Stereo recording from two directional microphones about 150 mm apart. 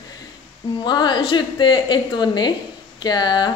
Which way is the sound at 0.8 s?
30° left (ahead or behind).